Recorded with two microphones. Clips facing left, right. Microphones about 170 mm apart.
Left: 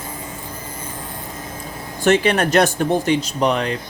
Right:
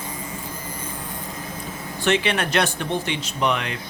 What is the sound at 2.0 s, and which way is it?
Speech, 45° left (ahead or behind).